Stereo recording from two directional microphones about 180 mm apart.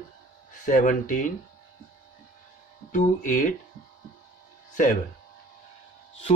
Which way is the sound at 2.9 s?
45° left (ahead or behind).